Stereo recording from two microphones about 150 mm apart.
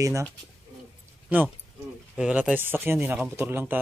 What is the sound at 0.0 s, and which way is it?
Speech, 20° right (ahead or behind).